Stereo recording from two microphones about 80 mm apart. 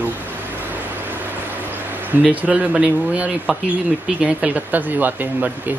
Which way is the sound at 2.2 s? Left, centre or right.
Centre.